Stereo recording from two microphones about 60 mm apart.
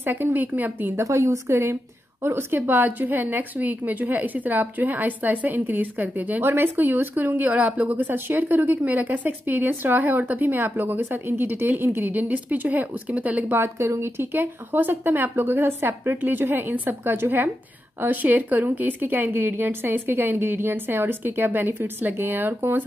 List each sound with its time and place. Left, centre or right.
0.0 s speech: right
0.9 s a woman's voice: right
13.5 s speech: right